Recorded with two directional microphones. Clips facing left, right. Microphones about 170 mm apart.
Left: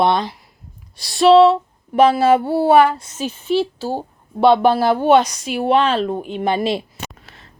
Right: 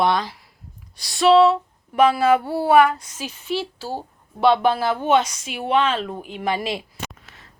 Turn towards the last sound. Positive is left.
turn(degrees=30)  # may be behind; listen again after turning